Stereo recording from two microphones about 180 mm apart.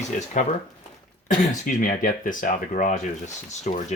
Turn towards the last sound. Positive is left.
turn(degrees=40)  # may be behind; listen again after turning